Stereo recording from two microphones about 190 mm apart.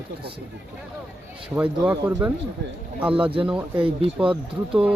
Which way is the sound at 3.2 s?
30° right (ahead or behind).